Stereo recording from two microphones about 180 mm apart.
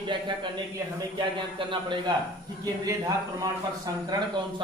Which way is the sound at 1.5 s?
25° right (ahead or behind).